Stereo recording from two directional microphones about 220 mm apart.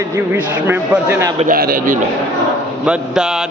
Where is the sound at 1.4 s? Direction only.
40° right (ahead or behind).